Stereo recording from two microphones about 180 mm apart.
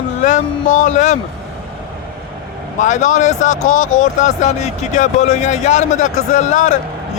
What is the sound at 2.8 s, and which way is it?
Speech, 45° left (ahead or behind).